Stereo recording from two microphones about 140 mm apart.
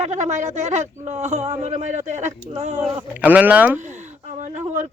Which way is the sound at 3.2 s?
10° right (ahead or behind).